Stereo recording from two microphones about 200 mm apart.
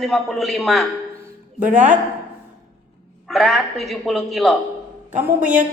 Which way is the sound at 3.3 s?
Centre (ahead or behind).